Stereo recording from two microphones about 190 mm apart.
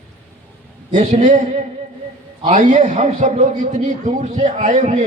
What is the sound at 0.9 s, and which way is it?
A man's voice, 40° right (ahead or behind).